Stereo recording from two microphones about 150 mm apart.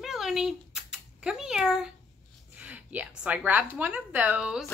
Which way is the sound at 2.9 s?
10° right (ahead or behind).